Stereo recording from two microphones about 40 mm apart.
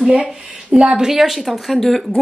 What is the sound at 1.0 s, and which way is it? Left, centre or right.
Speech, centre.